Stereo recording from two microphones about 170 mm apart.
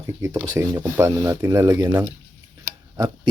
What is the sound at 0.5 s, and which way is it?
Speech, 20° right (ahead or behind).